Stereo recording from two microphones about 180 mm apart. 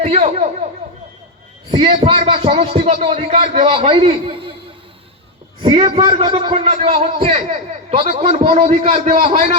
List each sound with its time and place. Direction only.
0.0 s speech: 35° right (ahead or behind)
1.7 s a man's voice: 30° right (ahead or behind)
5.5 s a man's voice: 30° right (ahead or behind)